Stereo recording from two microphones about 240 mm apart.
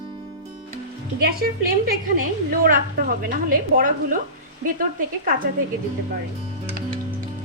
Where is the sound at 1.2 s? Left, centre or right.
Right.